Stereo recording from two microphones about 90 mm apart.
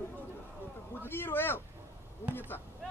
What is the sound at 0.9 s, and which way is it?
Speech, 25° left (ahead or behind).